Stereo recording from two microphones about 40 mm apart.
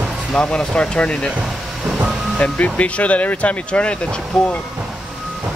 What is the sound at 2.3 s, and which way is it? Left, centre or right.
Speech, left.